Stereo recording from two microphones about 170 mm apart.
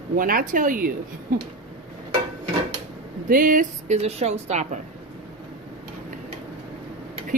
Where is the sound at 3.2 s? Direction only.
55° right (ahead or behind).